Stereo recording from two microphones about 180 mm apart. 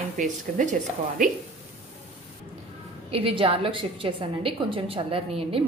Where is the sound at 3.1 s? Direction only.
30° right (ahead or behind).